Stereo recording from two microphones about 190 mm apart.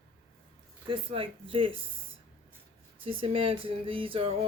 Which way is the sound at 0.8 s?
30° right (ahead or behind).